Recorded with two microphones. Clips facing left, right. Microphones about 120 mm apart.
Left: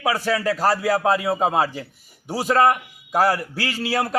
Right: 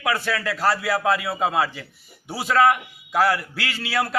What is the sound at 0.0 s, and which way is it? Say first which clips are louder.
Speech: left 3 dB; 35° left (ahead or behind).